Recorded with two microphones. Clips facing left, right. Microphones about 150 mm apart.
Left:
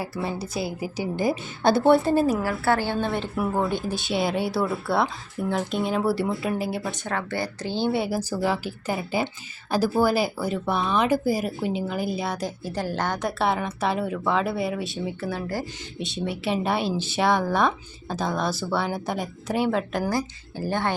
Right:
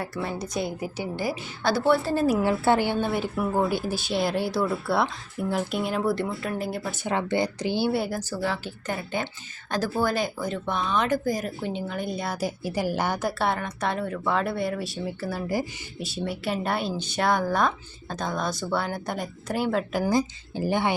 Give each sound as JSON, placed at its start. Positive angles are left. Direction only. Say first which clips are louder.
{"t": 0.0, "sound": "speech", "louder": "left 1 dB", "side_deg": 5}
{"t": 1.2, "sound": "speech", "louder": "left 6 dB", "side_deg": 20}
{"t": 2.4, "sound": "speech", "louder": "right 2 dB", "side_deg": -20}
{"t": 7.0, "sound": "speech", "louder": "right 3 dB", "side_deg": -20}
{"t": 7.9, "sound": "speech", "louder": "left 1 dB", "side_deg": 0}
{"t": 8.2, "sound": "speech", "louder": "left 4 dB", "side_deg": 10}
{"t": 13.4, "sound": "speech", "louder": "left 5 dB", "side_deg": 5}
{"t": 20.1, "sound": "speech", "louder": "right 3 dB", "side_deg": -20}